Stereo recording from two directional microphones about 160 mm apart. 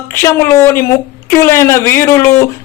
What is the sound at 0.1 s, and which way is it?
A woman's voice, 15° left (ahead or behind).